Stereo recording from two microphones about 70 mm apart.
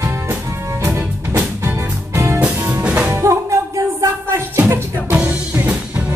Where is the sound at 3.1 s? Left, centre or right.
Right.